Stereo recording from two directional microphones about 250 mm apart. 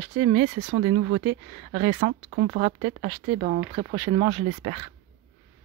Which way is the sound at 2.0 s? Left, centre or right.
Right.